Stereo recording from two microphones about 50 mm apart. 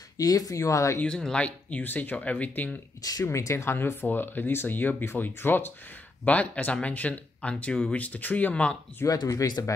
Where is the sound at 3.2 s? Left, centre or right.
Left.